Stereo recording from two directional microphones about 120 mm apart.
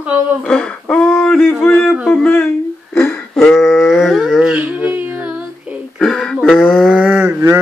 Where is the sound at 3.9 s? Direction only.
Centre (ahead or behind).